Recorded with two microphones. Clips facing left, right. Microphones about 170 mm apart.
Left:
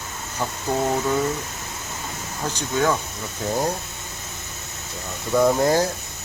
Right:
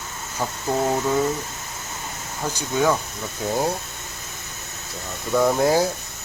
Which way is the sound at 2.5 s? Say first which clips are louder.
Right 1 dB; 10° right (ahead or behind).